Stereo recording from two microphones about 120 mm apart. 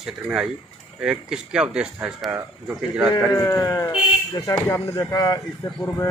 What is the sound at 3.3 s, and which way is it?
A man's voice, 25° left (ahead or behind).